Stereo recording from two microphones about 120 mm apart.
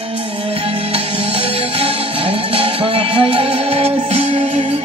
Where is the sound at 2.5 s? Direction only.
50° right (ahead or behind).